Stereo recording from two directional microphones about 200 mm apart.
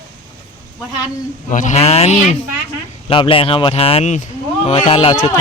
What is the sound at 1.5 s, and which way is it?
Speech, 40° left (ahead or behind).